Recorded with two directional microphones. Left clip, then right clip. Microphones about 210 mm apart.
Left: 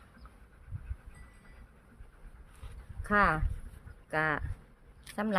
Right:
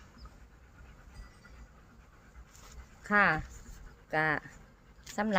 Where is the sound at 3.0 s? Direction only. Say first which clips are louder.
Even; 10° left (ahead or behind).